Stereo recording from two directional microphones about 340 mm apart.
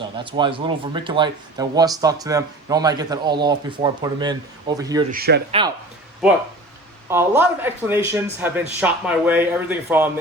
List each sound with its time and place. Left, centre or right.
0.2 s speech: centre
5.1 s speech: right
7.1 s speech: centre